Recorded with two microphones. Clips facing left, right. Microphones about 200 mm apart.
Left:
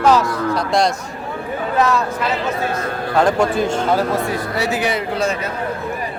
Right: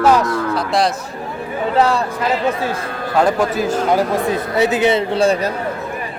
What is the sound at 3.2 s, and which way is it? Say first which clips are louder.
Speech: even; 5° right (ahead or behind).